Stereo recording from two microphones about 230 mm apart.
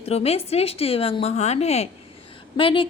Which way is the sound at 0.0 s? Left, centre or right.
Left.